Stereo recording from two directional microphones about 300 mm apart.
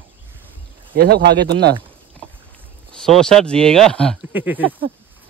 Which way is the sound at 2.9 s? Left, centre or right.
Centre.